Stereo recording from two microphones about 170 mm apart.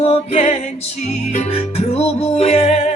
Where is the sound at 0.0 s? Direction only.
35° left (ahead or behind).